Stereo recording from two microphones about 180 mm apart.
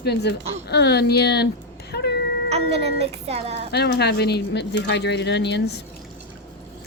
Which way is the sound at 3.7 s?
65° left (ahead or behind).